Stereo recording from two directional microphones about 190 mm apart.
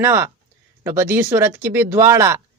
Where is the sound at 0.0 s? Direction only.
10° right (ahead or behind).